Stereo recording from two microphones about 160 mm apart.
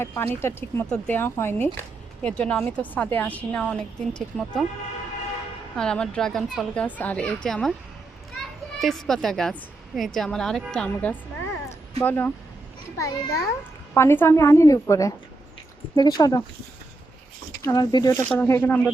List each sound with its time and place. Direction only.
0.0 s a woman's voice: 15° left (ahead or behind)
5.7 s speech: 5° left (ahead or behind)
8.8 s a woman's voice: centre (ahead or behind); by 16.4 s 25° left (ahead or behind)
17.6 s a woman's voice: 25° left (ahead or behind)